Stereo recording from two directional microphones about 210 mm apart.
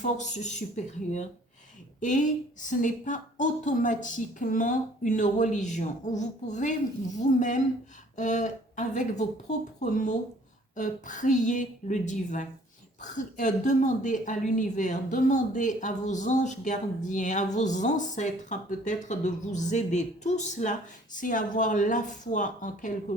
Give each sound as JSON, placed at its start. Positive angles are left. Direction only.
{"t": 0.0, "sound": "speech", "side_deg": 35}